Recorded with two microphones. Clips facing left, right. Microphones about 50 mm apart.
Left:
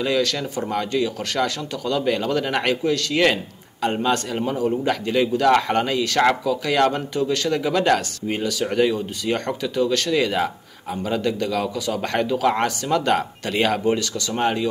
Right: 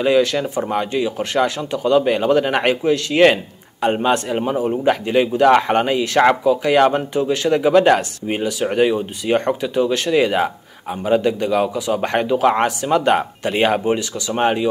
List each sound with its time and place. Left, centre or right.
0.0 s a man's voice: right